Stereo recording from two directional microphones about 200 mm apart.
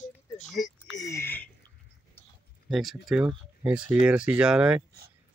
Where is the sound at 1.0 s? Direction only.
15° left (ahead or behind).